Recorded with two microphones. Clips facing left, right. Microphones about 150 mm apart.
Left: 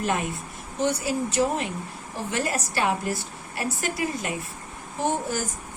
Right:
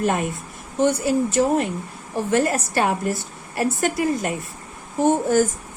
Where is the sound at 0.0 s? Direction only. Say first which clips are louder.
Right 4 dB; 50° right (ahead or behind).